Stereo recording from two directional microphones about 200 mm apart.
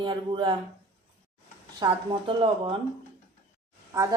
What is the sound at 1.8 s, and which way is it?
Speech, 25° right (ahead or behind).